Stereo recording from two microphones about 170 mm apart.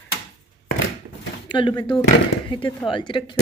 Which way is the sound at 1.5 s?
30° left (ahead or behind).